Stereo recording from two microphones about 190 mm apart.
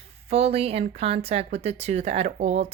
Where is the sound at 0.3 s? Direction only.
35° right (ahead or behind).